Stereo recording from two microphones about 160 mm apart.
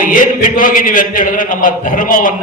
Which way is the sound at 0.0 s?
55° left (ahead or behind).